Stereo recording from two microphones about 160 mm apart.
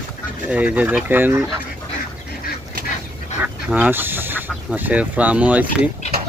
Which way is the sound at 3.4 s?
10° right (ahead or behind).